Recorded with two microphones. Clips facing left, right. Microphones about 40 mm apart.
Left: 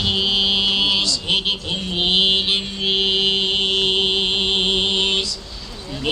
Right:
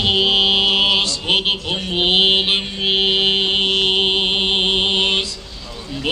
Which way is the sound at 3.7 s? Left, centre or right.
Centre.